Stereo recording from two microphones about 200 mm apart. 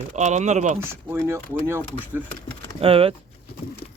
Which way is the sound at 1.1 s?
10° right (ahead or behind).